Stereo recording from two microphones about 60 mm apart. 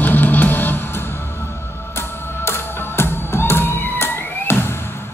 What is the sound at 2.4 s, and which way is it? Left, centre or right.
Music, left.